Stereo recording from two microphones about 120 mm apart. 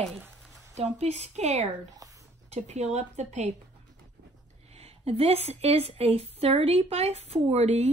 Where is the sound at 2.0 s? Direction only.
30° right (ahead or behind).